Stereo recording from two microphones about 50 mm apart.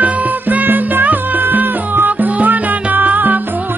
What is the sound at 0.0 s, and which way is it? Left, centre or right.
Music, right.